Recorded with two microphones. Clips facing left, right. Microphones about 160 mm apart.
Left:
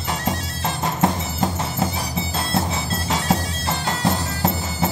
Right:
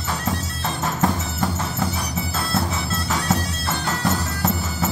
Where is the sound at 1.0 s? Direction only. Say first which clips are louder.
Left 2 dB; 25° left (ahead or behind).